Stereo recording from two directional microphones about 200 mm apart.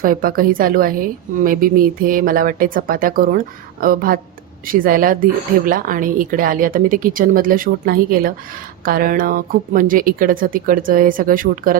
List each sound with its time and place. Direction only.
0.0 s speech: 45° right (ahead or behind)